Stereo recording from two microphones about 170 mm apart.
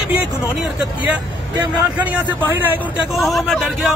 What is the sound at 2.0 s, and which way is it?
Speech, 10° right (ahead or behind).